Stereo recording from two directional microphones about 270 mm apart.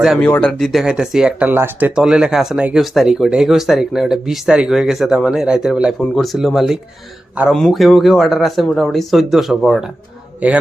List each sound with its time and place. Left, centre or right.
0.0 s speech: centre